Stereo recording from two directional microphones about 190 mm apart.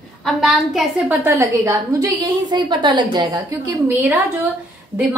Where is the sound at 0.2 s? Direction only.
Centre (ahead or behind).